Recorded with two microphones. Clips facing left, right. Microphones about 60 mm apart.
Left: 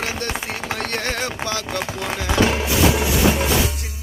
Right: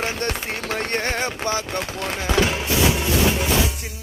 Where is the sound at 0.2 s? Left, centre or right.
Right.